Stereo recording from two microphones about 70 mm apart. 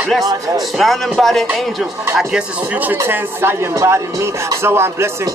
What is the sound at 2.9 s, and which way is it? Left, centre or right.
Speech, right.